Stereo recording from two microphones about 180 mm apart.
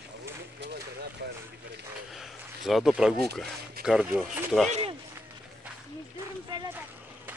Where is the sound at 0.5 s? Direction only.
70° right (ahead or behind).